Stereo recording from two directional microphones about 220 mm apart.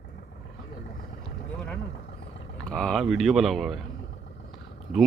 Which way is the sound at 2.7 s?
5° left (ahead or behind).